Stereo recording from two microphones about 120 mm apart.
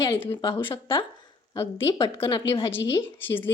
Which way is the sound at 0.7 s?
45° left (ahead or behind).